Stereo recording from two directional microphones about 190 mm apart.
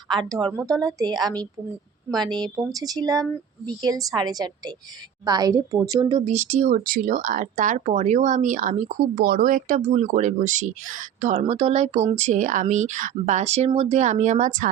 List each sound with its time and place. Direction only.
0.1 s speech: 20° right (ahead or behind)
6.7 s speech: 45° right (ahead or behind)